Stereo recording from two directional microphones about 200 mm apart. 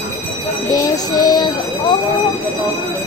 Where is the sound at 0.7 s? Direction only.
20° left (ahead or behind).